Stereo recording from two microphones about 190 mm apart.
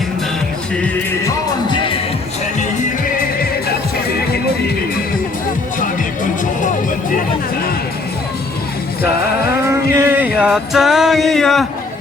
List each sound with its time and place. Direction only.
9.6 s music: 15° right (ahead or behind)